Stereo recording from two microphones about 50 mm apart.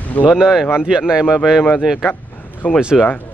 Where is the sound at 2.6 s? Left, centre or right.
Left.